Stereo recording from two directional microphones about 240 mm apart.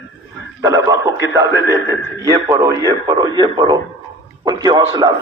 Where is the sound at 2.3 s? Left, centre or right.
Centre.